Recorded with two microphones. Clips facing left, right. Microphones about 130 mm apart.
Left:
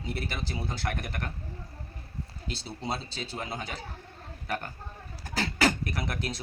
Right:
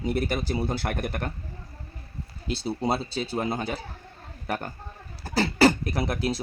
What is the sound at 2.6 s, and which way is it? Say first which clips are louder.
Speech: right 9 dB; 45° right (ahead or behind).